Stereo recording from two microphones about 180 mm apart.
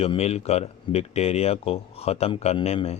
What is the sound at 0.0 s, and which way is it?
A man's voice, 35° left (ahead or behind).